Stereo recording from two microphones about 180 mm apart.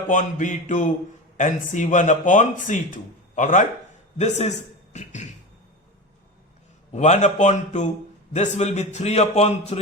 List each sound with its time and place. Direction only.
0.1 s a man's voice: 45° left (ahead or behind)
6.9 s a man's voice: 40° left (ahead or behind)